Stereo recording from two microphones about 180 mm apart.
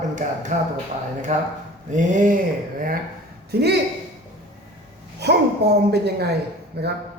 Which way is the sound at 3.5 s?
65° right (ahead or behind).